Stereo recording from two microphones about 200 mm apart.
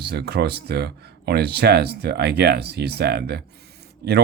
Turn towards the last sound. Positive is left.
turn(degrees=-55)  # may be behind; listen again after turning